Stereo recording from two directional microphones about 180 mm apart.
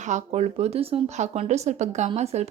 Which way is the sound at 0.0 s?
40° right (ahead or behind).